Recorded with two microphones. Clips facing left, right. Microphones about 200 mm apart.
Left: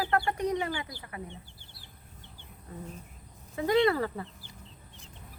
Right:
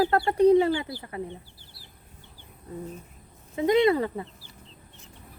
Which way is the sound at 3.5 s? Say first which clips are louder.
Right 4 dB; 20° right (ahead or behind).